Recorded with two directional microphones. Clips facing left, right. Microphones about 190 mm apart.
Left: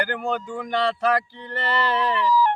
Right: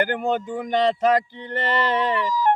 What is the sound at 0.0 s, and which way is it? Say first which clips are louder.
Speech: right 3 dB; 20° right (ahead or behind).